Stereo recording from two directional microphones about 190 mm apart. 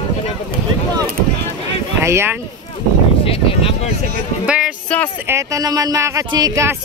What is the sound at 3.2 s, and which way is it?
Speech, 30° left (ahead or behind).